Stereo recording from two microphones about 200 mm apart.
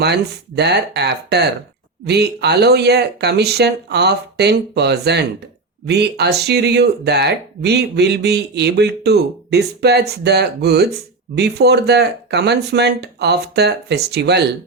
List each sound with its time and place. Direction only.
0.0 s speech: 55° right (ahead or behind)